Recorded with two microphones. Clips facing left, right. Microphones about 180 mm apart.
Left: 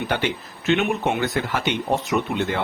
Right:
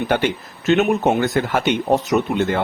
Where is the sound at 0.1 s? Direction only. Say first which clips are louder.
Right 5 dB; 50° right (ahead or behind).